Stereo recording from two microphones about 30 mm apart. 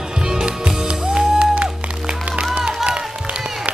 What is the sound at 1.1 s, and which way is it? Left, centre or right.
Music, right.